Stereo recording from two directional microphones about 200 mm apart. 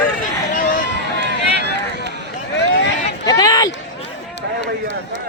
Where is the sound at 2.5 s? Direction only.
60° left (ahead or behind).